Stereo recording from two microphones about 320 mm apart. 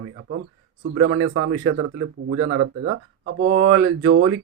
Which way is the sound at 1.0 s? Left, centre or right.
Right.